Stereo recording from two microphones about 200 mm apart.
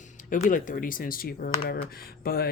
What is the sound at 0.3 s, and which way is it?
Speech, 40° left (ahead or behind).